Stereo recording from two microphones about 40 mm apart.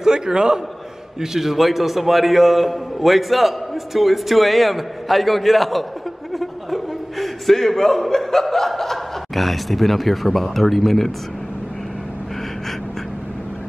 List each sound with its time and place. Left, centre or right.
0.0 s a man's voice: centre